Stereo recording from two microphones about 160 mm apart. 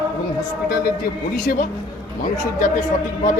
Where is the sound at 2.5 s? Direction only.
55° left (ahead or behind).